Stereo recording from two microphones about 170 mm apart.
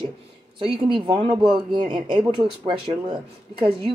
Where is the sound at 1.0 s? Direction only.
30° right (ahead or behind).